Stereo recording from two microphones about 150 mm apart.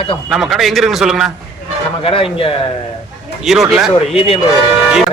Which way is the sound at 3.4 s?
Centre (ahead or behind).